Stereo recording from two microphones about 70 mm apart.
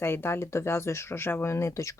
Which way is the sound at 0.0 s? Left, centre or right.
Left.